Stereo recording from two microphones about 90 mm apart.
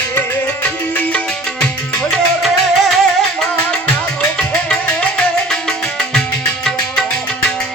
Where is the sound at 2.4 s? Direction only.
Centre (ahead or behind).